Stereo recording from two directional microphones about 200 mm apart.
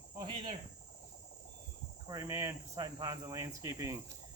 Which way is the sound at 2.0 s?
15° right (ahead or behind).